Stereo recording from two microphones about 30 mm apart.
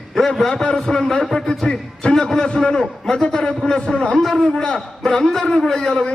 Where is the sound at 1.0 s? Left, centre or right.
Centre.